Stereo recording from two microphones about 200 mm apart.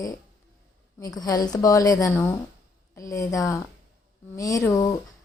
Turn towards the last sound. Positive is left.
turn(degrees=15)  # may be behind; listen again after turning